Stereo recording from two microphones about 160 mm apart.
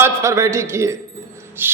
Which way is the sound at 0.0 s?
20° right (ahead or behind).